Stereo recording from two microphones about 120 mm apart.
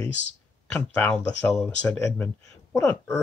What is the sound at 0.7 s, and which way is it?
Speech, 10° left (ahead or behind).